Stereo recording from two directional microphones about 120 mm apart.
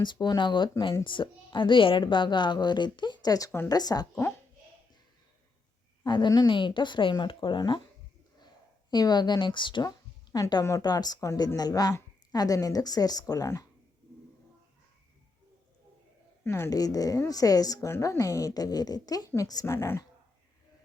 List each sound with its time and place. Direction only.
0.0 s a woman's voice: 40° left (ahead or behind)
6.0 s a woman's voice: 40° left (ahead or behind)
8.9 s a woman's voice: 35° left (ahead or behind)
10.3 s a woman's voice: 30° left (ahead or behind)
16.4 s a woman's voice: 20° left (ahead or behind)